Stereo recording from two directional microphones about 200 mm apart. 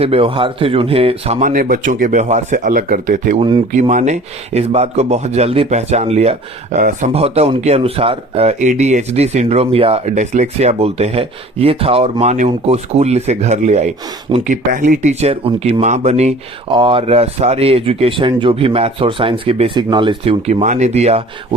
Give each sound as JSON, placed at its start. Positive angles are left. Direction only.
{"t": 0.0, "sound": "a man's voice", "side_deg": -30}